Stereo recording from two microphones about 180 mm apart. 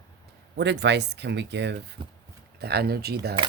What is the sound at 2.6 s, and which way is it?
Speech, 60° right (ahead or behind).